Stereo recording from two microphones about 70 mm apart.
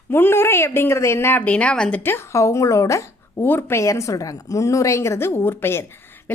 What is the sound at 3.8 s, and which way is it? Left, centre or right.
A woman's voice, left.